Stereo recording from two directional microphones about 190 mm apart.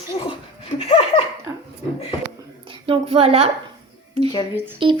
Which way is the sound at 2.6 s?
30° right (ahead or behind).